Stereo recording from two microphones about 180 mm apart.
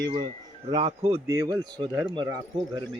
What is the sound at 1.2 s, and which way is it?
Speech, 15° right (ahead or behind).